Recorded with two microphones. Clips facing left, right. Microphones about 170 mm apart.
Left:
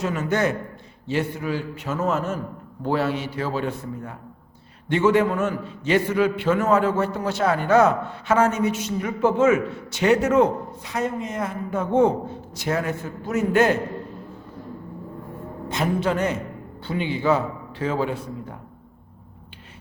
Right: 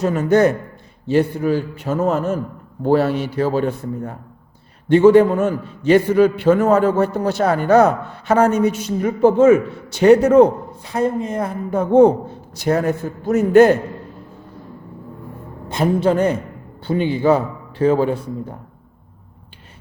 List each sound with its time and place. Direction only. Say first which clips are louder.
0.0 s a man's voice: right 8 dB; 40° right (ahead or behind)
15.7 s a man's voice: right 6 dB; 30° right (ahead or behind)